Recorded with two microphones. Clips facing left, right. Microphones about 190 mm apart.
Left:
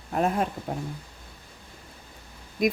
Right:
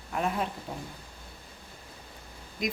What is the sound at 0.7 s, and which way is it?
Speech, 70° left (ahead or behind).